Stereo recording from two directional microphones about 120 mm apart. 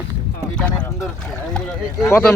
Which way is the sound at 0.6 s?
10° left (ahead or behind).